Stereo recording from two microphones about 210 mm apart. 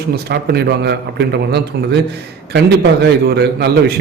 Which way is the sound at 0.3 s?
50° right (ahead or behind).